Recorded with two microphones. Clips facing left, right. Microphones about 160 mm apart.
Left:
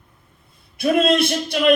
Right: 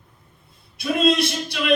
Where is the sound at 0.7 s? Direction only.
55° left (ahead or behind).